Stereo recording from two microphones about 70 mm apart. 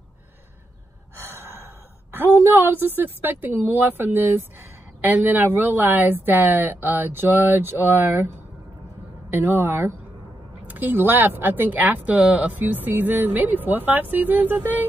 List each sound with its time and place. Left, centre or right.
1.2 s gasp: right
2.1 s a woman's voice: right
9.3 s a woman's voice: right